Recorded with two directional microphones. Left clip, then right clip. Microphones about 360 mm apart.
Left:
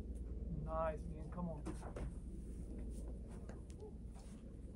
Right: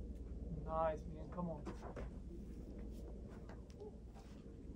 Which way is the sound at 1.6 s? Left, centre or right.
Left.